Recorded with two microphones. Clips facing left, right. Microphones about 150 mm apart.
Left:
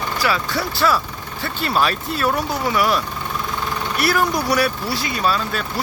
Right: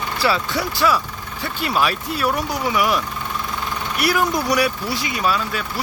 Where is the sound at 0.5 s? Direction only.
15° right (ahead or behind).